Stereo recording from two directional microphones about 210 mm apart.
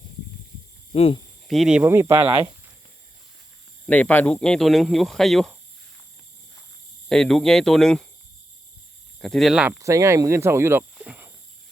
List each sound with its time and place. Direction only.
0.9 s speech: 30° left (ahead or behind)
1.5 s speech: centre (ahead or behind)
3.8 s speech: 5° left (ahead or behind)
7.1 s speech: centre (ahead or behind)
9.2 s speech: centre (ahead or behind)
9.8 s speech: 15° right (ahead or behind)